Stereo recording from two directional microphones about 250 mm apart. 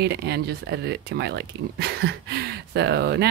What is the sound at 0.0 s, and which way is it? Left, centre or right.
Speech, right.